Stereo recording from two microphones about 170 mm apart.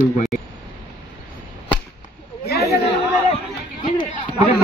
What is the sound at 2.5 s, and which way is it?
Chatter, 70° left (ahead or behind).